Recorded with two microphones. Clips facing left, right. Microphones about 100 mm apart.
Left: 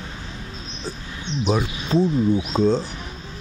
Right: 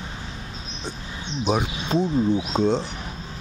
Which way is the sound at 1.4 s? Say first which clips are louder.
Left 1 dB; 20° right (ahead or behind).